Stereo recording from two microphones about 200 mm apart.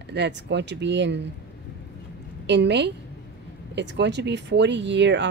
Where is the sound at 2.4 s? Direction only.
60° right (ahead or behind).